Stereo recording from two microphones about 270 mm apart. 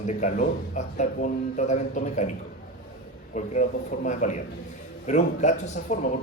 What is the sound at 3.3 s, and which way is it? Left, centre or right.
Speech, left.